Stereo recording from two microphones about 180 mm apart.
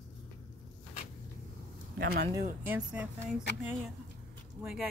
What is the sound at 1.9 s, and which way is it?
Speech, 55° right (ahead or behind).